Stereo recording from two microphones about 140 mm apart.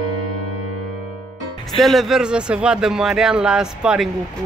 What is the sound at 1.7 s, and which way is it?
Speech, centre (ahead or behind).